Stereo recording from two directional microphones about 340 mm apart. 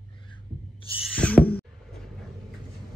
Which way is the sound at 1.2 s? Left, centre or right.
Centre.